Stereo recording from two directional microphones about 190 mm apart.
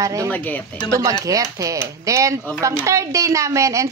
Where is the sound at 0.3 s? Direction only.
10° left (ahead or behind).